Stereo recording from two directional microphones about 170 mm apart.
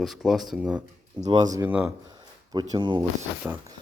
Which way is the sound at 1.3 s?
25° right (ahead or behind).